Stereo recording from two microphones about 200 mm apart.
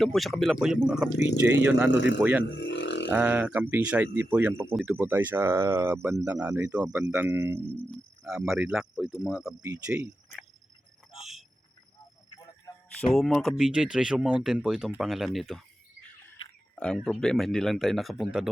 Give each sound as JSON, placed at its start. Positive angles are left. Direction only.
{"t": 0.0, "sound": "speech", "side_deg": 0}
{"t": 1.9, "sound": "a man's voice", "side_deg": 60}
{"t": 3.1, "sound": "speech", "side_deg": -5}
{"t": 8.2, "sound": "speech", "side_deg": -5}
{"t": 9.6, "sound": "speech", "side_deg": -15}
{"t": 11.2, "sound": "cricket", "side_deg": 0}
{"t": 13.1, "sound": "speech", "side_deg": 0}